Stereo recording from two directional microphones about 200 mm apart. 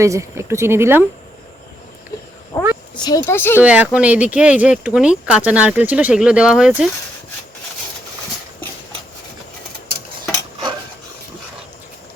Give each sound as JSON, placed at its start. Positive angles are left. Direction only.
{"t": 0.0, "sound": "speech", "side_deg": -15}
{"t": 2.5, "sound": "speech", "side_deg": 10}
{"t": 3.6, "sound": "speech", "side_deg": -5}